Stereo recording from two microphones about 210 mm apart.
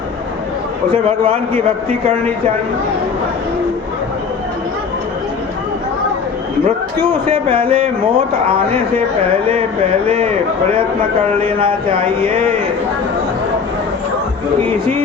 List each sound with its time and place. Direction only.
1.0 s speech: 25° right (ahead or behind)
6.7 s speech: 25° right (ahead or behind)
11.4 s speech: 25° right (ahead or behind)